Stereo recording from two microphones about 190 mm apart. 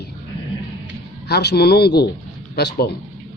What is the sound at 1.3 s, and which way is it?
Speech, 60° left (ahead or behind).